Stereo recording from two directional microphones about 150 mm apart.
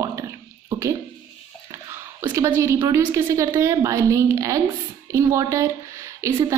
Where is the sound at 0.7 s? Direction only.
20° right (ahead or behind).